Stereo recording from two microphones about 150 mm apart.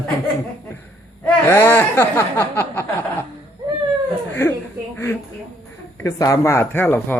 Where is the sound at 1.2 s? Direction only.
15° left (ahead or behind).